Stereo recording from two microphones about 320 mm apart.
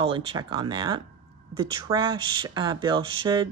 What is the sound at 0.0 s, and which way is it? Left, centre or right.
Speech, centre.